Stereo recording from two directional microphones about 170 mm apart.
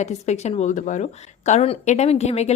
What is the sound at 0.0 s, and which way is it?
Speech, 40° left (ahead or behind).